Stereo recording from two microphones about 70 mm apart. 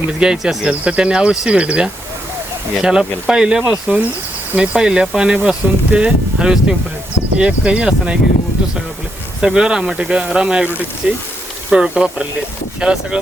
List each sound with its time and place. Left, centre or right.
0.2 s speech: centre
9.4 s speech: centre